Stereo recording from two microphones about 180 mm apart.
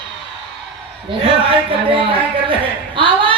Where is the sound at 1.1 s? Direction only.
30° right (ahead or behind).